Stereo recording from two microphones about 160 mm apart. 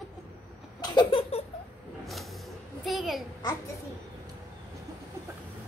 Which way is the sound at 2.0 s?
Centre (ahead or behind).